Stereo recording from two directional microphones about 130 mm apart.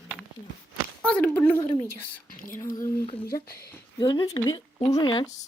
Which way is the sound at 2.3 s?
90° left.